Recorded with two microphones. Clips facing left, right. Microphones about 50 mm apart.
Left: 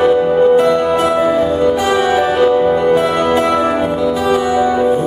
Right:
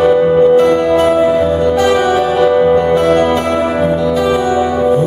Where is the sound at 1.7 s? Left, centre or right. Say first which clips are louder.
Right 2 dB; centre.